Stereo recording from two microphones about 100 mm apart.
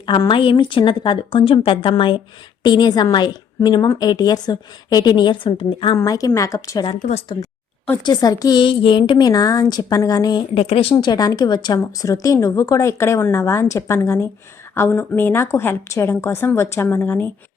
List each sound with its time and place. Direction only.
0.3 s a woman's voice: 60° left (ahead or behind)
6.1 s speech: 35° left (ahead or behind)
6.8 s speech: 90° left
8.0 s speech: 40° left (ahead or behind)
8.6 s a woman's voice: 60° left (ahead or behind); by 10.4 s 40° left (ahead or behind)
10.5 s speech: 75° left (ahead or behind)
10.9 s speech: 45° left (ahead or behind); by 17.3 s 20° left (ahead or behind)